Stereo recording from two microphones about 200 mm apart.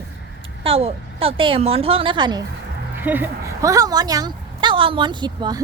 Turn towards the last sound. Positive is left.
turn(degrees=-20)  # may be behind; listen again after turning